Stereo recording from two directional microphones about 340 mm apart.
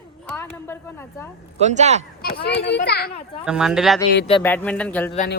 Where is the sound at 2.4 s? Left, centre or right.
Left.